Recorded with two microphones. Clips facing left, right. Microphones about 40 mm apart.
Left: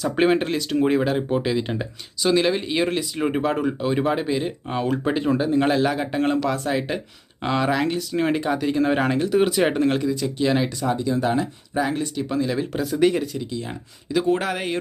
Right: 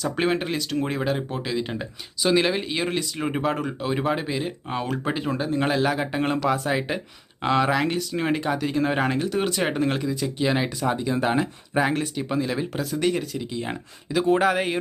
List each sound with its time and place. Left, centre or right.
0.0 s speech: centre
2.2 s speech: centre
11.1 s speech: right
12.1 s speech: centre
12.8 s speech: centre
13.5 s speech: right
14.1 s speech: centre